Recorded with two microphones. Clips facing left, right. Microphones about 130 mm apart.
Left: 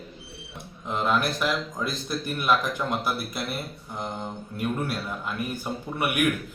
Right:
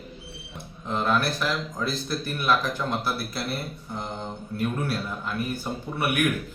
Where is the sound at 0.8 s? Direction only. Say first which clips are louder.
Even; 10° left (ahead or behind).